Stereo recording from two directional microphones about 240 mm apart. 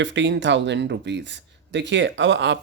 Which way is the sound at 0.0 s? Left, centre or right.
Right.